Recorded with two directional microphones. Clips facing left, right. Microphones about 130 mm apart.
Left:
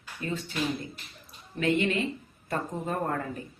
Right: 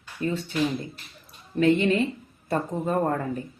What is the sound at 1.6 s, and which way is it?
Speech, 35° right (ahead or behind).